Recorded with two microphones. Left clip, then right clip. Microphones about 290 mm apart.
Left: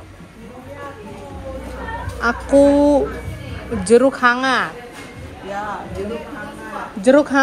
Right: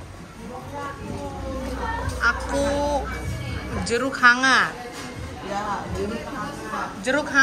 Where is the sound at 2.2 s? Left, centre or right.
Centre.